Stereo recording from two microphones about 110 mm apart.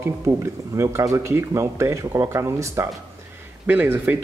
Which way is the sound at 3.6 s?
15° right (ahead or behind).